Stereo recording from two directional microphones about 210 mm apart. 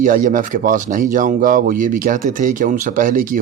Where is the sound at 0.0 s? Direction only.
40° right (ahead or behind).